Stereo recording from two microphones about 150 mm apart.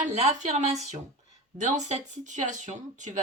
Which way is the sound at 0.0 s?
50° right (ahead or behind).